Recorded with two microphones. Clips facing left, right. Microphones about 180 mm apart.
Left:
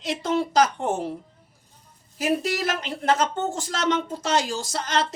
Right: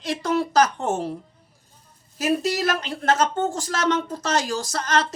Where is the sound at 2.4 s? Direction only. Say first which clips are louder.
Right 3 dB; 40° right (ahead or behind).